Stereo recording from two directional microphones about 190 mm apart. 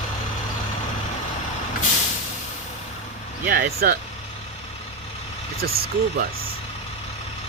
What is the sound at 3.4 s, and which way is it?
Speech, 50° right (ahead or behind).